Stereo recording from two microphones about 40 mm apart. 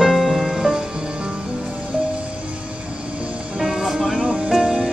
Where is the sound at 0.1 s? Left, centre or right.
Centre.